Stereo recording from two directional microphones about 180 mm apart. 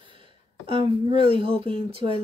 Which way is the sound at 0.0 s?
30° right (ahead or behind).